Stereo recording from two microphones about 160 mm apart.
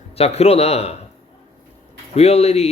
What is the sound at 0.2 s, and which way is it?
Speech, 40° left (ahead or behind).